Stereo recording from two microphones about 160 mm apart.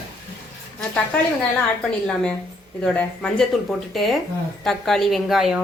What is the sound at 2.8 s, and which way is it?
Speech, 5° left (ahead or behind).